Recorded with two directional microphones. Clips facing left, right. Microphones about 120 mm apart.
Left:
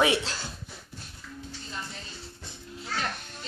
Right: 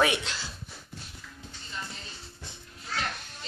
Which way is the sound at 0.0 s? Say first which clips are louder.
Left 2 dB; 30° left (ahead or behind).